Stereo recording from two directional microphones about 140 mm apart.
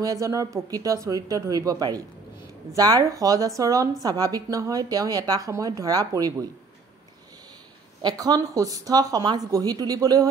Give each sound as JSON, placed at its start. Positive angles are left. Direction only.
{"t": 0.0, "sound": "a woman's voice", "side_deg": -25}
{"t": 8.0, "sound": "a woman's voice", "side_deg": -30}